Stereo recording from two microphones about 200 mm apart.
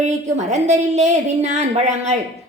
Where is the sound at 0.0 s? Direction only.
35° right (ahead or behind).